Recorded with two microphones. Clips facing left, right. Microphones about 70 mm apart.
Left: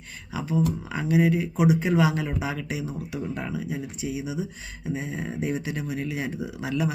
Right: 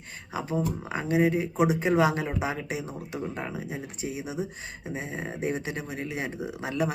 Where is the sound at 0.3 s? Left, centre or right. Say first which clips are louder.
Left 3 dB; right.